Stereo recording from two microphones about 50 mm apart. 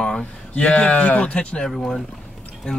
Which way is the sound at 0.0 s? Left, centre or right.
Left.